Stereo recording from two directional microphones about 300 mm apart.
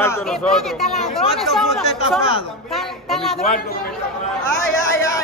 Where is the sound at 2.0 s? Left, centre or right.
Centre.